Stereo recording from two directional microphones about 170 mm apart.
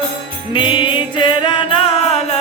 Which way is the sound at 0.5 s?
30° left (ahead or behind).